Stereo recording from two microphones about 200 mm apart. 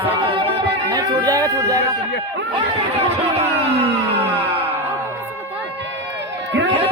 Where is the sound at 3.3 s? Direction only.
30° right (ahead or behind).